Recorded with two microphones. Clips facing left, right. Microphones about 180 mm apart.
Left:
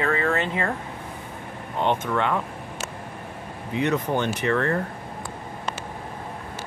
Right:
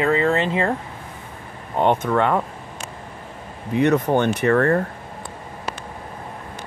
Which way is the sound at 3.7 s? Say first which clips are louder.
Right 6 dB; 50° right (ahead or behind).